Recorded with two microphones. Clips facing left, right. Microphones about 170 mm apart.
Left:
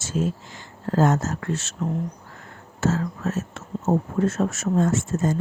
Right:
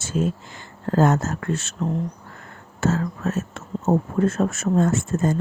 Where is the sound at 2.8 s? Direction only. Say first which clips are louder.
Right 1 dB; 60° right (ahead or behind).